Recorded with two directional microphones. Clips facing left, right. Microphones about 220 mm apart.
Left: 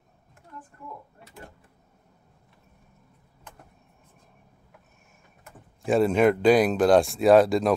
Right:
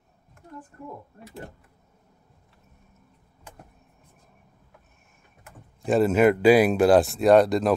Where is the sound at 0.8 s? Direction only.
40° right (ahead or behind).